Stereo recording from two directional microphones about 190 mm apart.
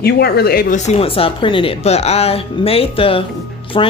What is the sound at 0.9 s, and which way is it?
A woman's voice, 30° left (ahead or behind).